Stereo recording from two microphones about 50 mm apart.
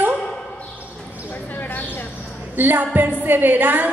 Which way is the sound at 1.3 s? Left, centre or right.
Left.